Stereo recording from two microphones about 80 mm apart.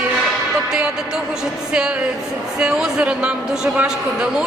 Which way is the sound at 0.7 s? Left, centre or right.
Centre.